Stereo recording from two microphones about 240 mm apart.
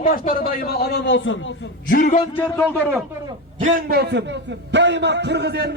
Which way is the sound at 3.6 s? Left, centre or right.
Right.